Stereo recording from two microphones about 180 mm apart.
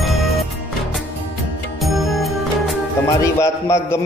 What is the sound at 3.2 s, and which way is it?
Speech, 15° left (ahead or behind).